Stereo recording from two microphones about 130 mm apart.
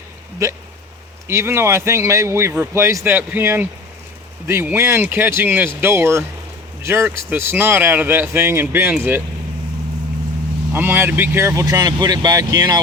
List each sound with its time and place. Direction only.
1.3 s speech: 20° right (ahead or behind)
10.7 s speech: 15° right (ahead or behind)